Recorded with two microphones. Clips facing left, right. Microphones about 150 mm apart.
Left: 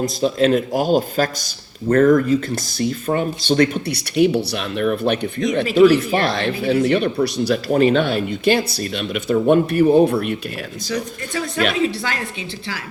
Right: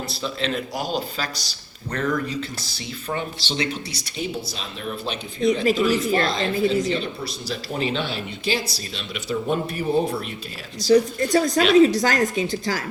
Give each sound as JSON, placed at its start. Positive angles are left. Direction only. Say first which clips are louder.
{"t": 0.0, "sound": "speech", "louder": "left 10 dB", "side_deg": 45}
{"t": 10.8, "sound": "a woman's voice", "louder": "right 10 dB", "side_deg": -35}